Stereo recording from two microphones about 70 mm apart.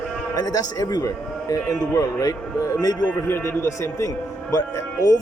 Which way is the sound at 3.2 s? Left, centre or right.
Left.